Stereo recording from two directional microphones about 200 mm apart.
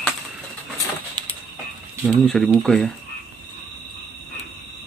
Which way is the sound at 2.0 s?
5° left (ahead or behind).